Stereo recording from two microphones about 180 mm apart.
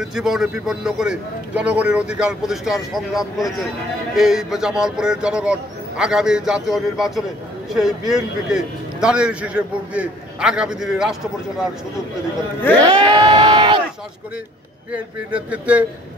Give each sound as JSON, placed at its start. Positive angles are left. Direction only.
{"t": 0.0, "sound": "a man's voice", "side_deg": -5}
{"t": 12.7, "sound": "crowd", "side_deg": -25}
{"t": 14.9, "sound": "speech", "side_deg": -5}